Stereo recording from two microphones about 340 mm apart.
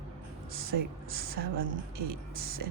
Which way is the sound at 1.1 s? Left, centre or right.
Right.